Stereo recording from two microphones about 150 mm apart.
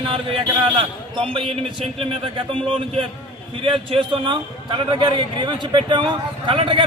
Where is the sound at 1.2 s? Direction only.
35° right (ahead or behind).